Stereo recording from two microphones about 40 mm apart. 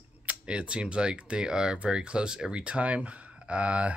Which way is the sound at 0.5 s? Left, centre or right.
Right.